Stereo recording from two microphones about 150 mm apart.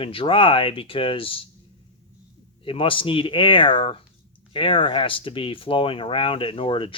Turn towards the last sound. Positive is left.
turn(degrees=35)  # may be behind; listen again after turning